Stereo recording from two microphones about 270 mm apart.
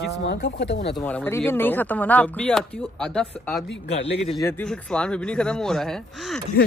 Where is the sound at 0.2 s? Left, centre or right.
Left.